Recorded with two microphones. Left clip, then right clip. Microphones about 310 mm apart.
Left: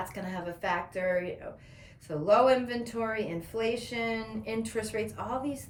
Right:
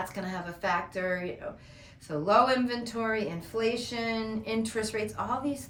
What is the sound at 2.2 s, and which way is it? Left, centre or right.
Speech, centre.